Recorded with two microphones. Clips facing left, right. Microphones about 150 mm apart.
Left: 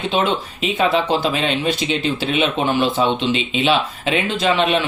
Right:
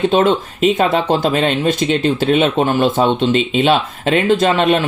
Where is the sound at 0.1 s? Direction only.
45° right (ahead or behind).